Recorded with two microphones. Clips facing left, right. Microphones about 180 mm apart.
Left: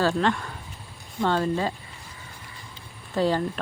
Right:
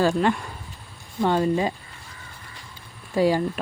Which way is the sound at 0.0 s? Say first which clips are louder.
Right 2 dB; 10° right (ahead or behind).